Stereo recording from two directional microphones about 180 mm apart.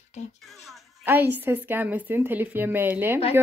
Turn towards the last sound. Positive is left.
turn(degrees=-10)  # may be behind; listen again after turning